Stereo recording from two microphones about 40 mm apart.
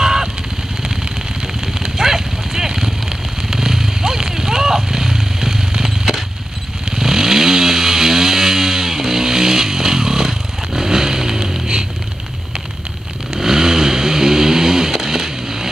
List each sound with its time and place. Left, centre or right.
0.0 s vehicle: centre
1.7 s horse: centre
3.4 s vehicle: centre
7.0 s vehicle: centre
13.3 s vehicle: centre